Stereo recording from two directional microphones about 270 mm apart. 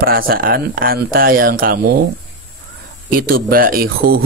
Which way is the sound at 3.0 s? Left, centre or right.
Right.